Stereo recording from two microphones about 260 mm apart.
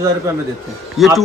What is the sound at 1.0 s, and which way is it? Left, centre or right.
Speech, centre.